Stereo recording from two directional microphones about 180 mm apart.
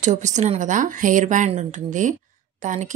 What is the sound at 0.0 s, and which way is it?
Speech, 40° right (ahead or behind).